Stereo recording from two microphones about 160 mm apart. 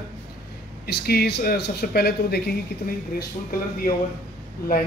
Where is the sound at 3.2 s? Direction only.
65° left (ahead or behind).